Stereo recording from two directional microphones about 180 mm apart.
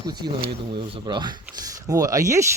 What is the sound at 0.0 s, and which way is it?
Speech, 20° right (ahead or behind).